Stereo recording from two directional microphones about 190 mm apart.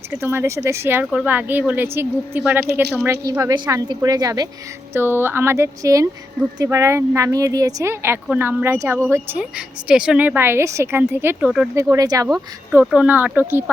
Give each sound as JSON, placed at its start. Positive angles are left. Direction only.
{"t": 0.1, "sound": "a woman's voice", "side_deg": -15}
{"t": 11.8, "sound": "a woman's voice", "side_deg": -15}
{"t": 12.8, "sound": "a woman's voice", "side_deg": -5}